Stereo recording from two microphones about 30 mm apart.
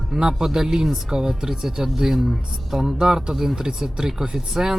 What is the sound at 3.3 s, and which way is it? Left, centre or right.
Speech, centre.